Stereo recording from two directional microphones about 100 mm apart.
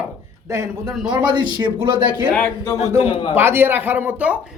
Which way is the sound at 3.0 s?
60° left (ahead or behind).